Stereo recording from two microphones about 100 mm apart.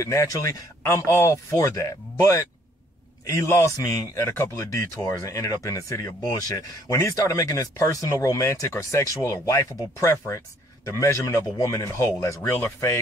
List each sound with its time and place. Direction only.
0.0 s speech: 30° left (ahead or behind)